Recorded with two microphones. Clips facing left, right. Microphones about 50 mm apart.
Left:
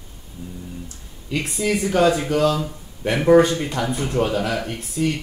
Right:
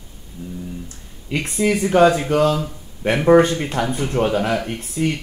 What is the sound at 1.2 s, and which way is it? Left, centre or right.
Mantra, right.